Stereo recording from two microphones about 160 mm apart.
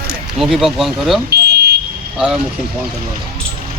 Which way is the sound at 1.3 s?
90° right.